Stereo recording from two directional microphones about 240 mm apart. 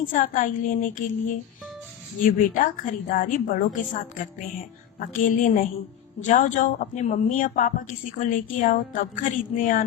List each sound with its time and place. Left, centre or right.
0.0 s speech: left
2.2 s speech: left